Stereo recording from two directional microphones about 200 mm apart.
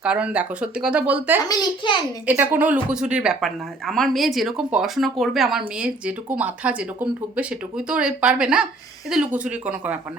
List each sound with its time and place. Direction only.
0.0 s speech: 5° right (ahead or behind)
1.5 s a child's voice: 20° left (ahead or behind)
2.2 s speech: 10° right (ahead or behind)